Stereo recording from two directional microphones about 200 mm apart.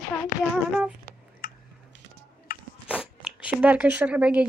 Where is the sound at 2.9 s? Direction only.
5° right (ahead or behind).